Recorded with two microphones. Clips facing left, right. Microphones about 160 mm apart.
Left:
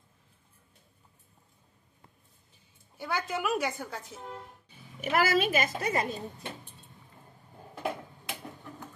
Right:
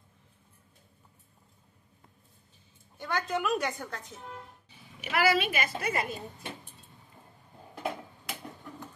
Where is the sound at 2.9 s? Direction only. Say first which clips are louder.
Right 1 dB; 5° left (ahead or behind).